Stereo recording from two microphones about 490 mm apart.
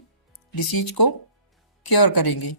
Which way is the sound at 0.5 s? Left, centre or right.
Left.